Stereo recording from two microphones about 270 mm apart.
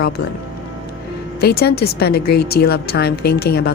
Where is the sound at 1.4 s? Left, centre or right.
Left.